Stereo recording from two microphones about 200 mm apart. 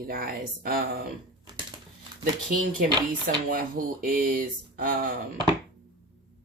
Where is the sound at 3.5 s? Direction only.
45° right (ahead or behind).